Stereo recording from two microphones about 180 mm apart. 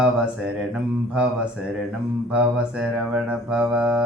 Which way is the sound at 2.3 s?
5° right (ahead or behind).